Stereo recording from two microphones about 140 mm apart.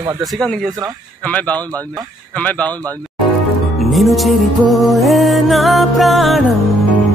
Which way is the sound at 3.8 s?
Centre (ahead or behind).